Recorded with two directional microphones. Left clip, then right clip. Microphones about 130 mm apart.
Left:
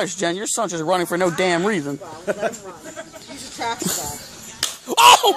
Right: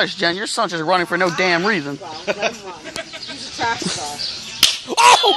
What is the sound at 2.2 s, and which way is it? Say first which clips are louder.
Speech: right 2 dB; 55° left (ahead or behind).